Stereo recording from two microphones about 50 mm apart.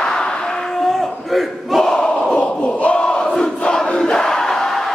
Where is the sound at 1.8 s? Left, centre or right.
Centre.